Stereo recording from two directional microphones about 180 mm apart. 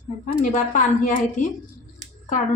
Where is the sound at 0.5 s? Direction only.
45° left (ahead or behind).